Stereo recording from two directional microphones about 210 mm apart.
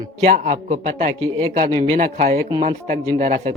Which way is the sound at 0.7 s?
30° right (ahead or behind).